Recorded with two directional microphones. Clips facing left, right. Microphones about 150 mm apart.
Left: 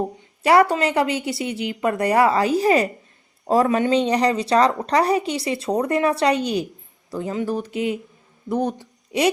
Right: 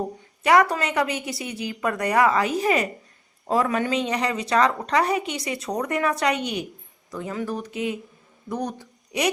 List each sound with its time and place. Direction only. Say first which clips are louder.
0.4 s a woman's voice: left 3 dB; 30° left (ahead or behind)